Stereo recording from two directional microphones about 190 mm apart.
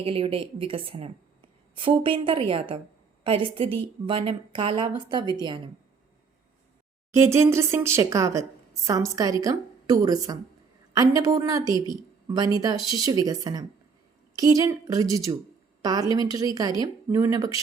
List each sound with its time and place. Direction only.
0.0 s a woman's voice: 30° right (ahead or behind)
7.1 s a woman's voice: 15° right (ahead or behind)